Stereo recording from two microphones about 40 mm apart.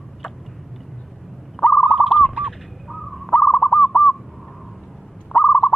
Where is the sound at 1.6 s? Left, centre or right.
Centre.